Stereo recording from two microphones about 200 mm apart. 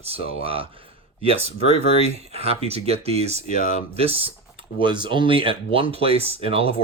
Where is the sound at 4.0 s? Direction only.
30° right (ahead or behind).